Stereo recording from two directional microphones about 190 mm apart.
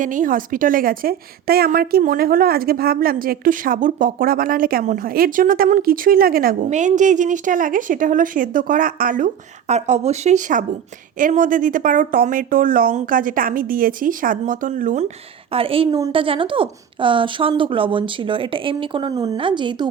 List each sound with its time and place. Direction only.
0.0 s speech: 45° right (ahead or behind); by 19.9 s 25° right (ahead or behind)